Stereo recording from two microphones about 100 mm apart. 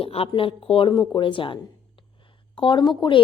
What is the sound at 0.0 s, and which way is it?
Speech, 75° left (ahead or behind).